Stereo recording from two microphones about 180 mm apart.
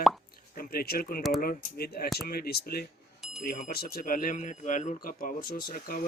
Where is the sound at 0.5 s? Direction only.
55° left (ahead or behind).